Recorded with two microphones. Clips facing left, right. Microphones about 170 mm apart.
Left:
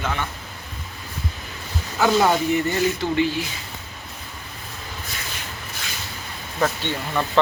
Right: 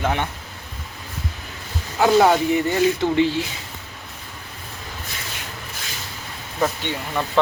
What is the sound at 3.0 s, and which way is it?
Speech, 25° right (ahead or behind).